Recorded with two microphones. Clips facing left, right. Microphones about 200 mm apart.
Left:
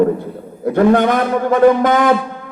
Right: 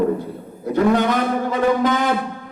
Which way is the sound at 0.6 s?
55° left (ahead or behind).